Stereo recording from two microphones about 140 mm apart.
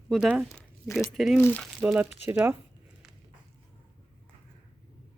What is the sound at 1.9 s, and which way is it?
Speech, 10° right (ahead or behind).